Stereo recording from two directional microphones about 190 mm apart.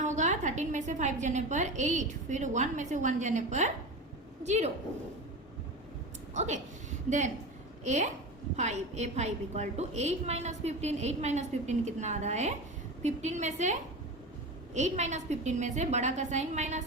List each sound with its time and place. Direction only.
0.0 s a woman's voice: 40° right (ahead or behind)
6.3 s a woman's voice: 40° right (ahead or behind)
7.9 s a woman's voice: 40° right (ahead or behind)